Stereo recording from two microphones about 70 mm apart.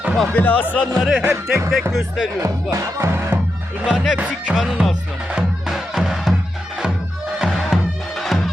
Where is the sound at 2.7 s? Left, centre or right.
Right.